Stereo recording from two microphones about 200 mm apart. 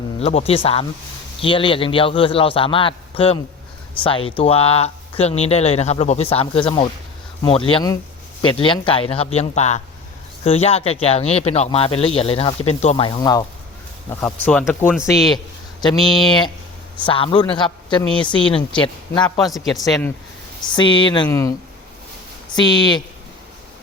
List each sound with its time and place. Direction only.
0.2 s speech: 30° left (ahead or behind)
14.1 s speech: 10° left (ahead or behind)
16.0 s a man's voice: centre (ahead or behind)
17.1 s speech: 25° left (ahead or behind)
19.4 s a man's voice: centre (ahead or behind)
20.7 s speech: 25° left (ahead or behind)
22.5 s speech: 20° left (ahead or behind)